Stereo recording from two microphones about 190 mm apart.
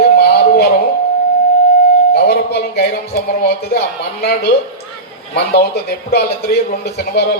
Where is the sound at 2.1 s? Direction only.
60° left (ahead or behind).